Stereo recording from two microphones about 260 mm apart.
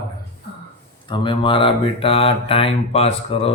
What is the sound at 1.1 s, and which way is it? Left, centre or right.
Speech, centre.